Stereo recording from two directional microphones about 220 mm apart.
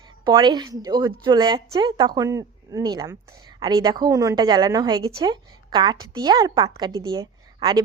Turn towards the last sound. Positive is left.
turn(degrees=-20)  # may be behind; listen again after turning